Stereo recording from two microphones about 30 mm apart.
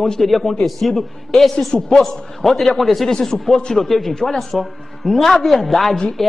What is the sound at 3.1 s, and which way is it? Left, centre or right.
A man's voice, centre.